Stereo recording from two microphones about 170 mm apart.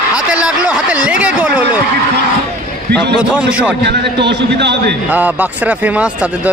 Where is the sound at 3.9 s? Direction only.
85° right.